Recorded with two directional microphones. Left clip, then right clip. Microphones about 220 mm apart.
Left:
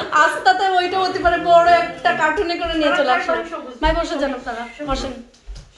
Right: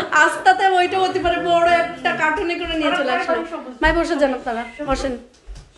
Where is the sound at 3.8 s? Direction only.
15° right (ahead or behind).